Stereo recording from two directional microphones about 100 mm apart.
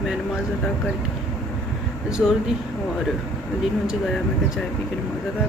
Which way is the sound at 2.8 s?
5° left (ahead or behind).